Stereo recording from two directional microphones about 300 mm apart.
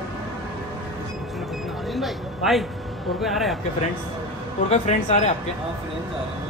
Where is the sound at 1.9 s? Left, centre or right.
Centre.